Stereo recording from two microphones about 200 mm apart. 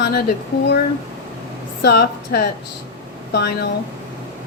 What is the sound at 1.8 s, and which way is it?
A woman's voice, 55° left (ahead or behind).